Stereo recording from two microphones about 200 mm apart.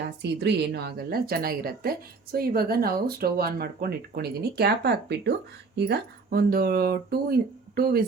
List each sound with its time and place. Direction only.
0.2 s speech: 55° right (ahead or behind)